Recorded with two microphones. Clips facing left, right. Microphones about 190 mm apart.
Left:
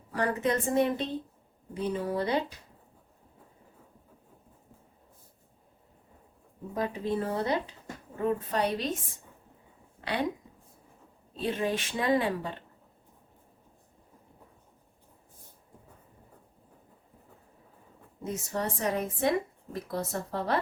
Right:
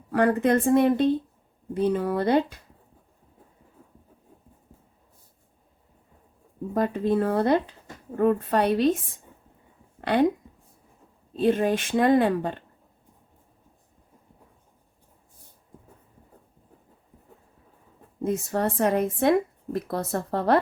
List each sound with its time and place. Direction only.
0.1 s speech: 60° right (ahead or behind)
6.7 s speech: 60° right (ahead or behind)
10.0 s speech: 50° right (ahead or behind)
11.3 s speech: 55° right (ahead or behind)
18.2 s speech: 55° right (ahead or behind)